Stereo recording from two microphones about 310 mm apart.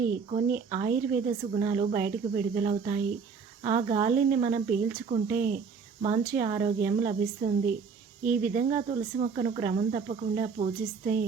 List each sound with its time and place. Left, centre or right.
0.0 s speech: right